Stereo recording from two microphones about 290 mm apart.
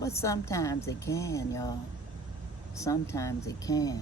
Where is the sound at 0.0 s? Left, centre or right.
Centre.